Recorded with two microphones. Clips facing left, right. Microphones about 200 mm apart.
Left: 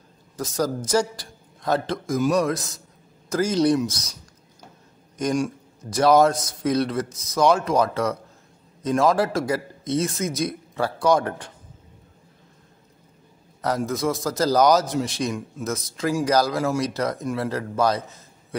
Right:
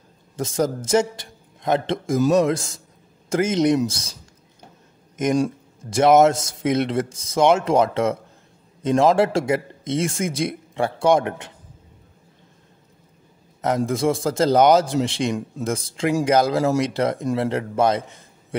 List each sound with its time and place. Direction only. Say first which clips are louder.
0.4 s a man's voice: right 2 dB; 25° right (ahead or behind)
5.4 s a man's voice: right 4 dB; 25° right (ahead or behind)
13.6 s a man's voice: right 3 dB; 25° right (ahead or behind)